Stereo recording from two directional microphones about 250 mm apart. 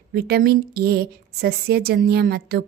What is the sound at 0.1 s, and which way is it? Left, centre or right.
A woman's voice, right.